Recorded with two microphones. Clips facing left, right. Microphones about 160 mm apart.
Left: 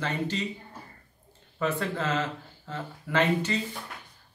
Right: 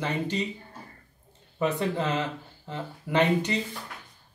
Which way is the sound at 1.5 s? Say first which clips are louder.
Right 2 dB; 20° right (ahead or behind).